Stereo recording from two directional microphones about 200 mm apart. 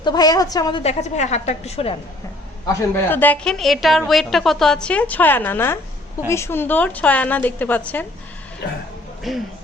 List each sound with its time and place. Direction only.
0.0 s a woman's voice: 20° left (ahead or behind)
0.8 s a woman's voice: 35° left (ahead or behind)
2.9 s a woman's voice: 10° left (ahead or behind)
9.3 s a woman's voice: centre (ahead or behind)